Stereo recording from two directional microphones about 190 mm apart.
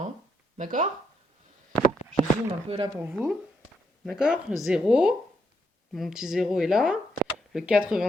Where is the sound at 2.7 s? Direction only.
30° right (ahead or behind).